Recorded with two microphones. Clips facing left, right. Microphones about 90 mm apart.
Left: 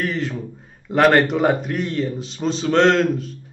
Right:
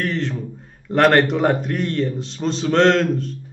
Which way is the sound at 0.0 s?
5° left (ahead or behind).